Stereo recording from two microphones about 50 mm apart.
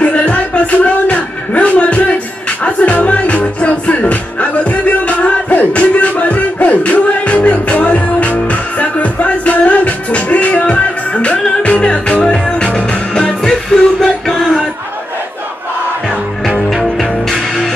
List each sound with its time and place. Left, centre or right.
0.0 s music: left
16.7 s music: centre